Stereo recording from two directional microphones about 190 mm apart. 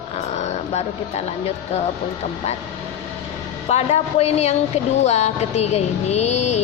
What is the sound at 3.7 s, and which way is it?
Music, 35° left (ahead or behind).